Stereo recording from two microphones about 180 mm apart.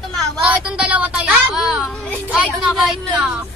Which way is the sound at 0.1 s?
5° right (ahead or behind).